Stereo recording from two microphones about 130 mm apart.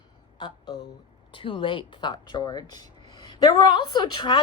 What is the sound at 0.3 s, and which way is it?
Speech, 35° left (ahead or behind).